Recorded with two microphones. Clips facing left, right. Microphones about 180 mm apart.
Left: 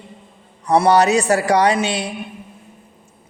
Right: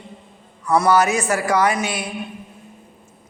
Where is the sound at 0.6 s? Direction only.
30° left (ahead or behind).